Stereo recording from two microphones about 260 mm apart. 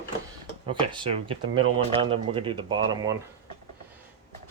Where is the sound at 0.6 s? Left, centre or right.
Centre.